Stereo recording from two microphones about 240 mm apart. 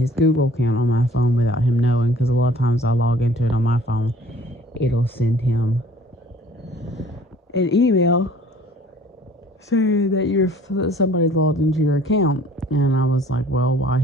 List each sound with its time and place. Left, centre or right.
0.2 s speech: left
7.5 s speech: left
9.7 s speech: left